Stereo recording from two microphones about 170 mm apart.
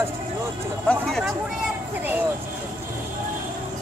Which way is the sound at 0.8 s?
Centre (ahead or behind).